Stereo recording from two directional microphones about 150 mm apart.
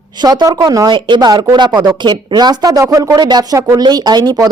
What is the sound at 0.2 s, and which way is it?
A man's voice, 25° right (ahead or behind).